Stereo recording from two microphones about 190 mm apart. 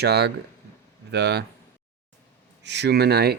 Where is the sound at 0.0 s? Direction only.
60° right (ahead or behind).